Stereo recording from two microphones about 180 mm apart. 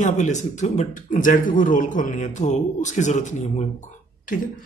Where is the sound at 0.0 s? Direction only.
40° left (ahead or behind).